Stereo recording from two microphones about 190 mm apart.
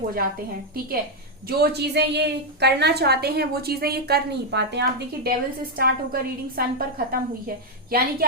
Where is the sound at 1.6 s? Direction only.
60° right (ahead or behind).